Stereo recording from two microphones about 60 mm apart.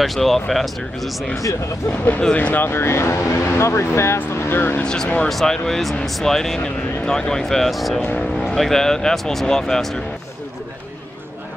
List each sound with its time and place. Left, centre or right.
0.0 s speech: centre
1.9 s speech: left
4.3 s vehicle: left
4.6 s speech: left
4.8 s speech: centre